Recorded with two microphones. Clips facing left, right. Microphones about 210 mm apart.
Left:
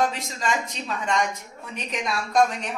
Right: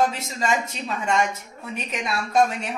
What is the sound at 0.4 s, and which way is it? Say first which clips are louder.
Speech: right 3 dB; 10° right (ahead or behind).